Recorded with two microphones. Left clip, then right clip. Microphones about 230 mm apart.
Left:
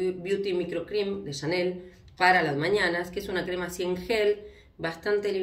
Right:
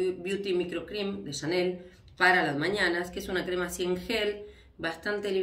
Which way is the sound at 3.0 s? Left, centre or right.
Centre.